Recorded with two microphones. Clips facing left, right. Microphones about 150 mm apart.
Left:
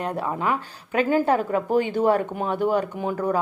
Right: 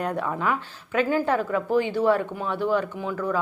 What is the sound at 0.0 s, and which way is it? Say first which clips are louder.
A woman's voice: even; 30° left (ahead or behind).